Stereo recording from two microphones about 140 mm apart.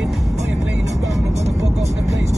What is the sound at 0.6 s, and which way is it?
Speech, 20° right (ahead or behind).